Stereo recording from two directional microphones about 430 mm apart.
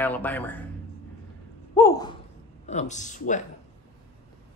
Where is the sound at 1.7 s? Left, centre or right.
Centre.